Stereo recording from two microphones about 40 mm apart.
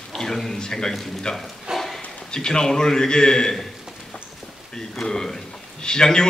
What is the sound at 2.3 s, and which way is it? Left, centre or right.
A man's voice, centre.